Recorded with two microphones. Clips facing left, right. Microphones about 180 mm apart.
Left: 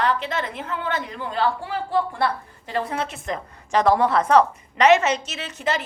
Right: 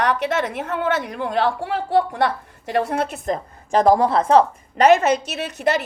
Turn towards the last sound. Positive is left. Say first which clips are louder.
# right 5 dB
turn(degrees=-60)  # may be behind; listen again after turning